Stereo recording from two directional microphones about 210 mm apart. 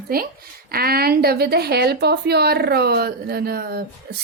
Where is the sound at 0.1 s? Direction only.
45° right (ahead or behind).